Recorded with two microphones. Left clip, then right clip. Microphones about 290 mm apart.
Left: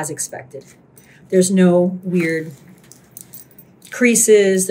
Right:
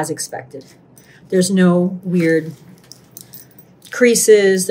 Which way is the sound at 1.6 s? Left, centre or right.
Centre.